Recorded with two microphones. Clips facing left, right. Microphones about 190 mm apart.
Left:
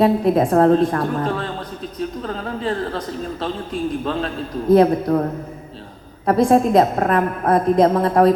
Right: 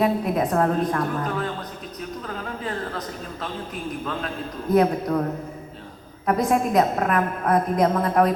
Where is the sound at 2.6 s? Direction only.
30° left (ahead or behind).